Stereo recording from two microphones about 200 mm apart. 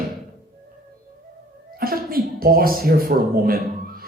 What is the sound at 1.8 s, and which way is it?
Speech, 45° right (ahead or behind).